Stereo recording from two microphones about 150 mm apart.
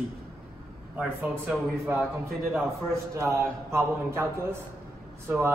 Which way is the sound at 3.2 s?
20° right (ahead or behind).